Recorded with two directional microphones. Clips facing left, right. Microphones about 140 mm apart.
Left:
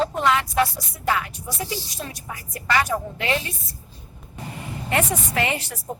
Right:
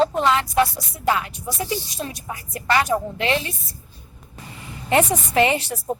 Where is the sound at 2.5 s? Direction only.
25° right (ahead or behind).